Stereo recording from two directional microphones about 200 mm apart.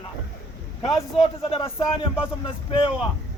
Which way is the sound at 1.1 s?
30° left (ahead or behind).